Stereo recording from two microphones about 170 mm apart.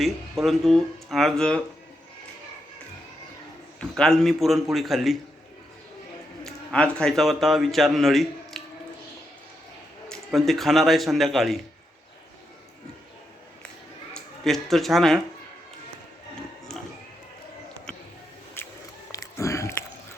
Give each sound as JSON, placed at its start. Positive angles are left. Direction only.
{"t": 0.0, "sound": "speech", "side_deg": 0}
{"t": 3.8, "sound": "speech", "side_deg": 5}
{"t": 6.4, "sound": "speech", "side_deg": 5}
{"t": 10.1, "sound": "speech", "side_deg": 0}
{"t": 14.1, "sound": "speech", "side_deg": 0}
{"t": 18.6, "sound": "biting", "side_deg": 15}
{"t": 19.1, "sound": "a sound", "side_deg": 20}